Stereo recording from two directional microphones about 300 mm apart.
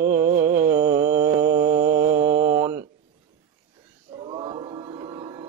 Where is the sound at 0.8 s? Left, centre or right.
Centre.